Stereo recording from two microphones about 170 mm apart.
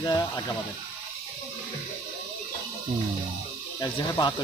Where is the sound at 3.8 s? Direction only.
25° left (ahead or behind).